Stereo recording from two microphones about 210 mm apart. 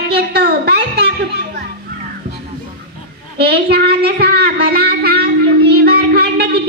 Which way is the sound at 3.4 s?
50° right (ahead or behind).